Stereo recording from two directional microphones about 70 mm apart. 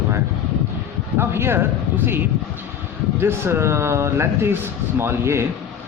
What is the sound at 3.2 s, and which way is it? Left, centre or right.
Speech, right.